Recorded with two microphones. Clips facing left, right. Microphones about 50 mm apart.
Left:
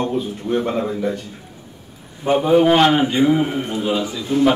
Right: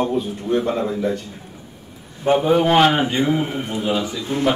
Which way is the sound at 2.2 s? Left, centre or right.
Centre.